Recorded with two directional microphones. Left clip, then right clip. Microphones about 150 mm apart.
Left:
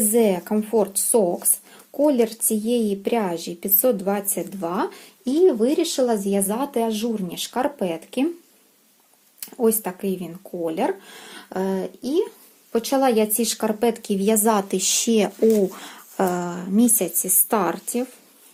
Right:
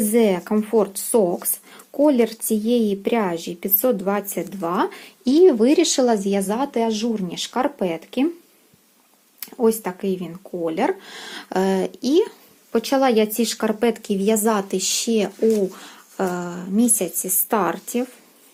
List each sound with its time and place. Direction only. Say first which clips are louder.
0.1 s speech: right 1 dB; 15° right (ahead or behind)
5.2 s speech: right 3 dB; 30° right (ahead or behind); by 8.3 s 10° right (ahead or behind)
9.4 s a sound: right 2 dB; 10° right (ahead or behind)
9.8 s speech: right 2 dB; 10° right (ahead or behind); by 12.3 s 40° right (ahead or behind)
12.7 s a woman's voice: right 1 dB; 20° right (ahead or behind)